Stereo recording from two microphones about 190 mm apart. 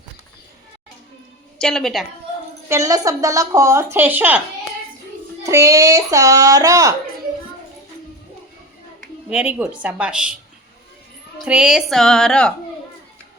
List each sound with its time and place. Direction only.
1.5 s a woman's voice: 5° left (ahead or behind)
2.6 s speech: 15° right (ahead or behind)
5.4 s speech: 15° right (ahead or behind)
9.3 s speech: 5° right (ahead or behind)
11.3 s a woman's voice: 5° right (ahead or behind)